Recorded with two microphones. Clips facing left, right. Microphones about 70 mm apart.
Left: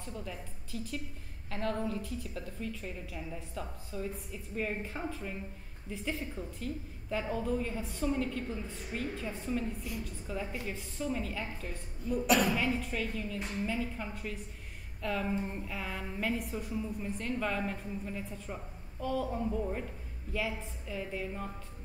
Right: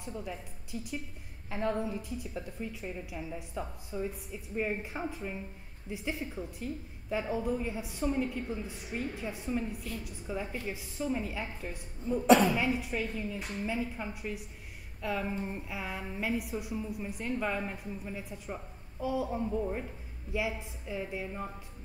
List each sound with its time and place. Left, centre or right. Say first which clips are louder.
0.0 s a woman's voice: right 2 dB; centre
12.3 s speech: right 6 dB; right
12.5 s a woman's voice: right 1 dB; centre
13.4 s a woman's voice: left 1 dB; centre